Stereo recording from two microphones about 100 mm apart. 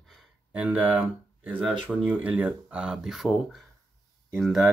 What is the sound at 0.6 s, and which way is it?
Speech, 15° right (ahead or behind).